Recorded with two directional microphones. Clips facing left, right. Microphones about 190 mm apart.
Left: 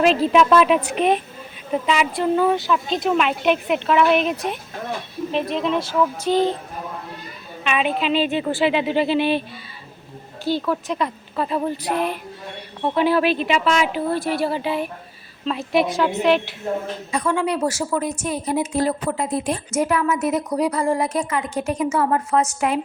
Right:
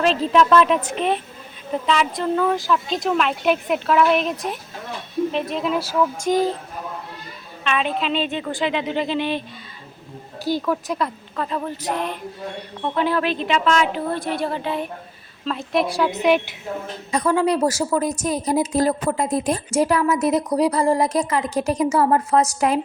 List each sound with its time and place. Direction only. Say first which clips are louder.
0.0 s a woman's voice: left 2 dB; 10° left (ahead or behind); by 6.0 s 5° right (ahead or behind)
6.2 s music: left 1 dB; 10° right (ahead or behind)
7.6 s a woman's voice: left 1 dB; 5° left (ahead or behind)
10.5 s music: even; 15° right (ahead or behind)
10.9 s a woman's voice: left 1 dB; 5° right (ahead or behind)
11.3 s a woman's voice: left 3 dB; 10° left (ahead or behind)
17.1 s a woman's voice: right 3 dB; 40° right (ahead or behind)